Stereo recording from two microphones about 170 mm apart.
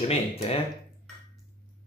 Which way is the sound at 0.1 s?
40° left (ahead or behind).